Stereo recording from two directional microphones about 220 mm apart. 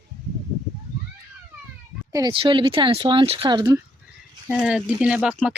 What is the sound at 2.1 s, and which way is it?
Speech, 20° right (ahead or behind).